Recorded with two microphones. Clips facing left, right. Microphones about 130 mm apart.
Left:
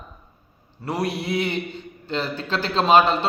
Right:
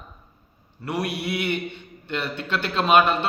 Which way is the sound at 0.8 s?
35° left (ahead or behind).